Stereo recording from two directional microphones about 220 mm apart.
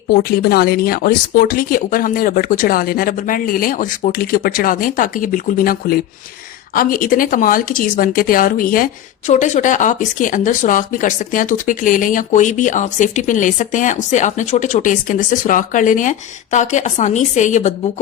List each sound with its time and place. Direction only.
0.1 s speech: 45° left (ahead or behind)